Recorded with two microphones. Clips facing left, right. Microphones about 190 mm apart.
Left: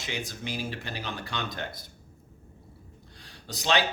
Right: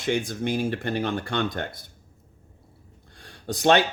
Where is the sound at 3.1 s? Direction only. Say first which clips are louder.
Right 10 dB; 55° right (ahead or behind).